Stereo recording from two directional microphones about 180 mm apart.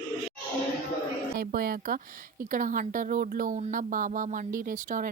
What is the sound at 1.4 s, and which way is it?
Speech, 55° right (ahead or behind).